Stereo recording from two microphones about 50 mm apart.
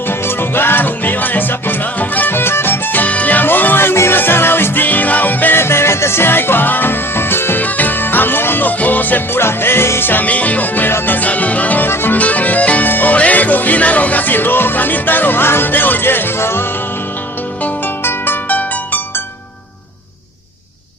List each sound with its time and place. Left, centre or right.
0.1 s music: left
2.3 s music: left
3.1 s music: left
5.5 s music: left
7.6 s music: left
9.4 s music: left
10.1 s music: left